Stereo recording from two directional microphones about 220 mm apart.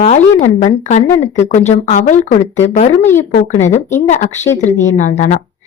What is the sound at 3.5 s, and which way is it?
A woman's voice, 35° left (ahead or behind).